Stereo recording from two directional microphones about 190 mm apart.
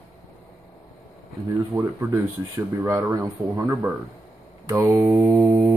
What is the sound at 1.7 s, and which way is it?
Speech, 15° right (ahead or behind).